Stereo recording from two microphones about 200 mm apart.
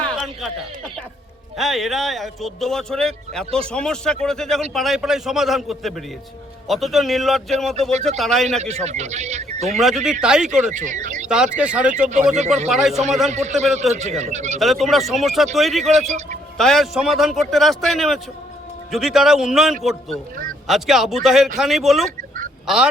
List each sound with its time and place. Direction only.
0.0 s a sound: 5° left (ahead or behind)
1.5 s speech: centre (ahead or behind)
8.4 s a man's voice: 35° right (ahead or behind)
10.0 s speech: 5° right (ahead or behind)
10.5 s speech: 40° right (ahead or behind)
11.3 s speech: 5° right (ahead or behind)
13.3 s a man's voice: 35° right (ahead or behind)
14.6 s speech: centre (ahead or behind)